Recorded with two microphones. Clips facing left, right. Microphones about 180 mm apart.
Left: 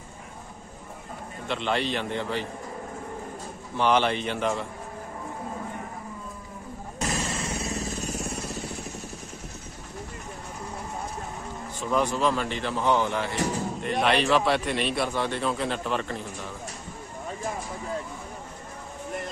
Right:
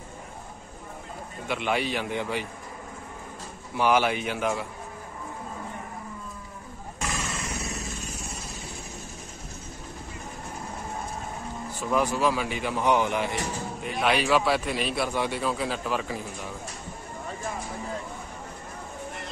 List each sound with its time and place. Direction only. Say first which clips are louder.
1.5 s speech: even; 10° right (ahead or behind)
3.7 s speech: even; 10° right (ahead or behind)
7.0 s vehicle: left 3 dB; 35° left (ahead or behind)
11.9 s speech: even; 5° right (ahead or behind)
13.8 s a man's voice: left 1 dB; centre (ahead or behind)